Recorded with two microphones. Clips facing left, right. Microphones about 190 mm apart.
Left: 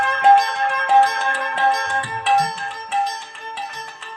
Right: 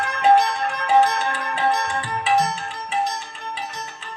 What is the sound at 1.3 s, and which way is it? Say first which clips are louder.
Music: left 2 dB; 60° left (ahead or behind).